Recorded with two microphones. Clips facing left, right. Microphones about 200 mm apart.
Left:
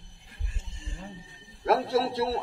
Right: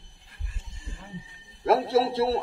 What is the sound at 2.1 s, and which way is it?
Music, 25° right (ahead or behind).